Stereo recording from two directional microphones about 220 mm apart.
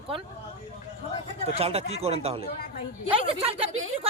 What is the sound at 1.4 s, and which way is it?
A woman's voice, 25° right (ahead or behind).